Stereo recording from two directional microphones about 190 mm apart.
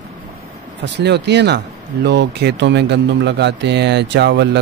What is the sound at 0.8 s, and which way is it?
Speech, 65° right (ahead or behind).